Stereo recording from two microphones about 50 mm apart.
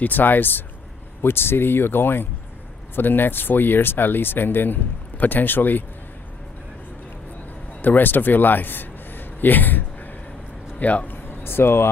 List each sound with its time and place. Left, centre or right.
0.0 s speech: left
7.8 s a man's voice: left
11.2 s speech: left